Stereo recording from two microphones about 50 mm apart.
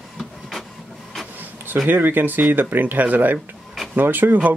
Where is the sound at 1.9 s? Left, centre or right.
Right.